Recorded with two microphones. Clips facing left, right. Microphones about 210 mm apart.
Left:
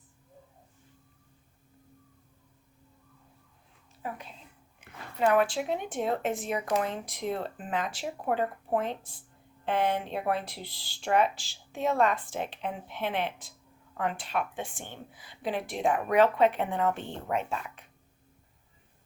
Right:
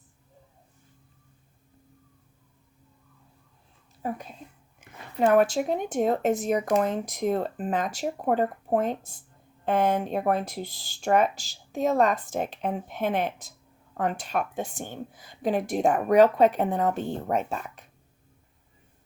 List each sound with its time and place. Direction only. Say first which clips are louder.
5.2 s speech: right 4 dB; 45° right (ahead or behind)